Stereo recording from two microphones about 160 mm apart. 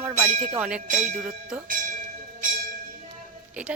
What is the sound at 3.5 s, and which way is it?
Speech, 10° right (ahead or behind).